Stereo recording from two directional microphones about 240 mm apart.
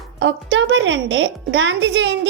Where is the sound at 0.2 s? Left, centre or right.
Right.